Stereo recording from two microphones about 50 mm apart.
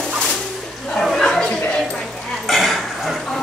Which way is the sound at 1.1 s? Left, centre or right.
Centre.